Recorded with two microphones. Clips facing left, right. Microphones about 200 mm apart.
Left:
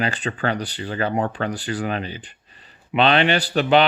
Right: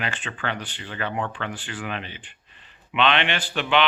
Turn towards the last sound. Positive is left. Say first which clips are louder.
# left 6 dB
turn(degrees=40)  # may be behind; listen again after turning